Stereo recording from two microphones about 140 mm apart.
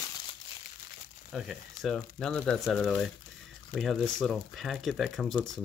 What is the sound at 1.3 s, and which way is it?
Speech, centre (ahead or behind).